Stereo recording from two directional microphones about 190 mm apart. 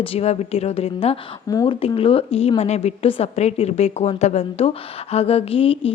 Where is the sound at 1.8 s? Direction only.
30° left (ahead or behind).